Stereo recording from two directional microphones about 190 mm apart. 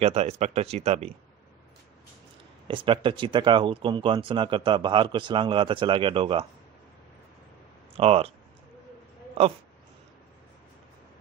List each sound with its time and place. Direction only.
0.0 s speech: 35° right (ahead or behind)
2.7 s speech: 25° right (ahead or behind)
7.9 s speech: 30° right (ahead or behind)